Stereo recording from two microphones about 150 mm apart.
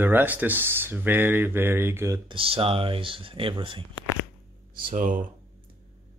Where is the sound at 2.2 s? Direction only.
35° right (ahead or behind).